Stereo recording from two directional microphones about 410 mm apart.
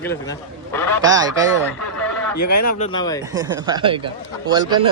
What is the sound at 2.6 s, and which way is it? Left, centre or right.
Speech, centre.